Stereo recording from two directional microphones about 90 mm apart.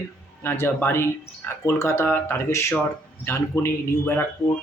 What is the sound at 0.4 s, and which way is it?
A man's voice, 25° left (ahead or behind).